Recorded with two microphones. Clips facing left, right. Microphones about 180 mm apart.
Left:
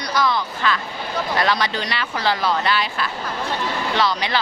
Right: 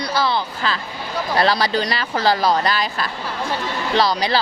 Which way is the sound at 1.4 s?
35° right (ahead or behind).